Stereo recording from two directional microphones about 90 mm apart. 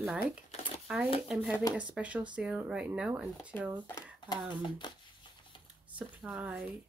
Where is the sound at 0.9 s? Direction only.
10° right (ahead or behind).